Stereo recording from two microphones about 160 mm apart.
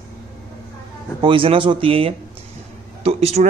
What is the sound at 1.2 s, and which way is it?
A man's voice, 35° right (ahead or behind).